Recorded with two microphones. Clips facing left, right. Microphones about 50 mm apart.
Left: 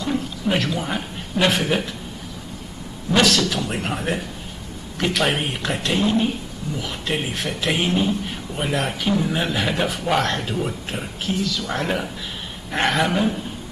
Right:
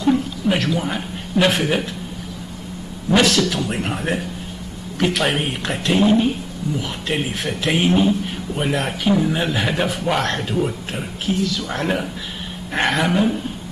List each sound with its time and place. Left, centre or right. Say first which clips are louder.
0.0 s a woman's voice: right 6 dB; centre
3.1 s a man's voice: right 2 dB; centre